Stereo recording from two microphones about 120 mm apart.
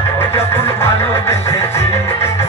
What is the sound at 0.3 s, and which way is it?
Music, 20° left (ahead or behind).